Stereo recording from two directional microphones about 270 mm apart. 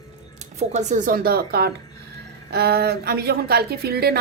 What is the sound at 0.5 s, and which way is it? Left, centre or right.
Speech, right.